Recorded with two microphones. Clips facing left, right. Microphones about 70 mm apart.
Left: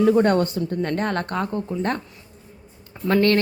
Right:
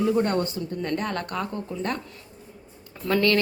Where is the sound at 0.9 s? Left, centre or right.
Left.